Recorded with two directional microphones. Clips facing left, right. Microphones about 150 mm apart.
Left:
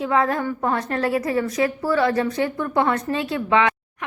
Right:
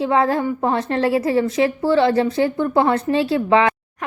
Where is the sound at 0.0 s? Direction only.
30° right (ahead or behind).